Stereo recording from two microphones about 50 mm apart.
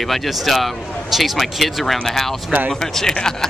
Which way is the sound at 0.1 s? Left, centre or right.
Centre.